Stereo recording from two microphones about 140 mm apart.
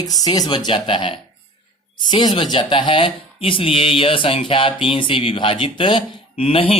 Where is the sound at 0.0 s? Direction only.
25° left (ahead or behind).